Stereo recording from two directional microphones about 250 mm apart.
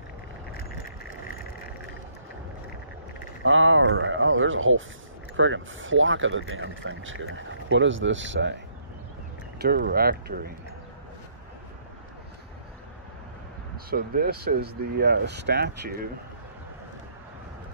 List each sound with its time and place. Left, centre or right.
3.4 s speech: right
9.6 s speech: right
13.8 s speech: right